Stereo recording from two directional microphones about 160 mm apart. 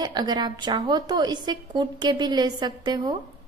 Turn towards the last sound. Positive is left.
turn(degrees=-25)  # may be behind; listen again after turning